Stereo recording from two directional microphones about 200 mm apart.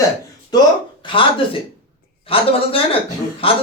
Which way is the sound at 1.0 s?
25° left (ahead or behind).